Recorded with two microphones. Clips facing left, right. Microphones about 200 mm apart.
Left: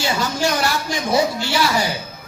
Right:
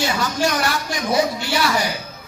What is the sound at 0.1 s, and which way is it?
Speech, 25° left (ahead or behind).